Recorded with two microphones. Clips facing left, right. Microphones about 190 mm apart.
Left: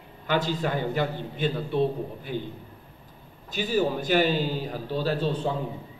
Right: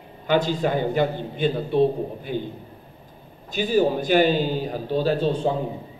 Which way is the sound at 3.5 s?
15° right (ahead or behind).